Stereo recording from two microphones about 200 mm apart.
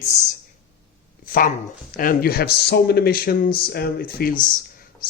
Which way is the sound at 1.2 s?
45° left (ahead or behind).